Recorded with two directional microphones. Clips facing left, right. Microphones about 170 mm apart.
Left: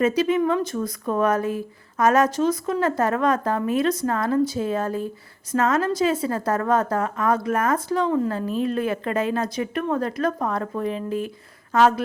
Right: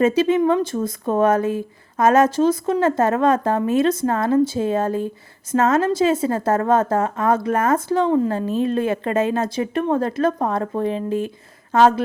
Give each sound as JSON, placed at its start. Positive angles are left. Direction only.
{"t": 0.0, "sound": "a woman's voice", "side_deg": -25}